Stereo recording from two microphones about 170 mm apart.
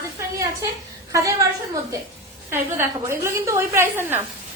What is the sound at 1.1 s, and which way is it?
Speech, 20° right (ahead or behind).